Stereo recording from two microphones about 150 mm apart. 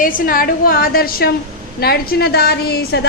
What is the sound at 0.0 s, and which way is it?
A woman's voice, 75° left (ahead or behind).